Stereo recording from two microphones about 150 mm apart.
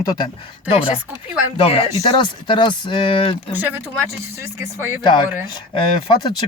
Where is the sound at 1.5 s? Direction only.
40° left (ahead or behind).